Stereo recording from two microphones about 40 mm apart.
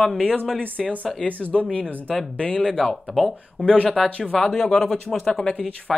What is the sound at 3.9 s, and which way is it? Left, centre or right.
Speech, centre.